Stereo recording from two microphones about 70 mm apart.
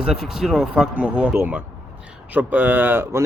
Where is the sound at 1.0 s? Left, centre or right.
Centre.